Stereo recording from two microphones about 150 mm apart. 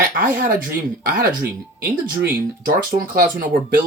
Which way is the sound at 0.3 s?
70° right (ahead or behind).